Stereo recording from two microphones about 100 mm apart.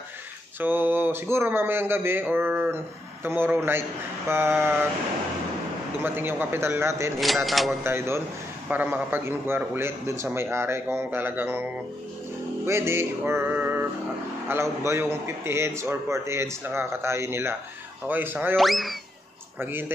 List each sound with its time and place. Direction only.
0.6 s a man's voice: 20° right (ahead or behind)
6.0 s a man's voice: 20° right (ahead or behind)
7.2 s speech: centre (ahead or behind)
7.8 s a man's voice: 25° right (ahead or behind)
12.6 s music: 25° right (ahead or behind)
14.5 s a man's voice: 25° right (ahead or behind)
18.6 s speech: centre (ahead or behind)
19.6 s a man's voice: 20° right (ahead or behind)